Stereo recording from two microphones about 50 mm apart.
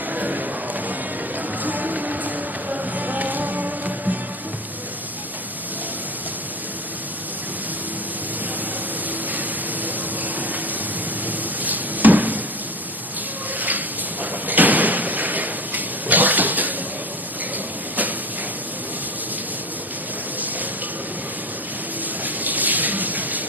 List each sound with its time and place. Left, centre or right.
0.1 s a sound: right
1.4 s music: right
9.3 s vehicle: right
11.3 s a sound: right
13.6 s door: right
22.2 s bathtub: right